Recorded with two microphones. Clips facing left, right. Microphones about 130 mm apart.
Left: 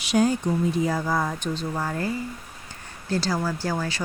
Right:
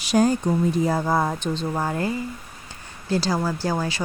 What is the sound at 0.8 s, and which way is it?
Speech, 25° right (ahead or behind).